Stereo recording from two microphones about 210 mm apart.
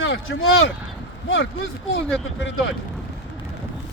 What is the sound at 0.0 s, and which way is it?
Speech, 70° left (ahead or behind).